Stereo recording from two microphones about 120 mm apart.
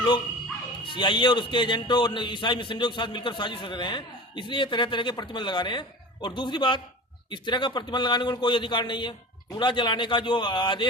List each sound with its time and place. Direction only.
0.9 s a man's voice: 40° left (ahead or behind)